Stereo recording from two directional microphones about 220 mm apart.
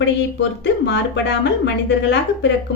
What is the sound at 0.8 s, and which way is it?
A woman's voice, 50° left (ahead or behind).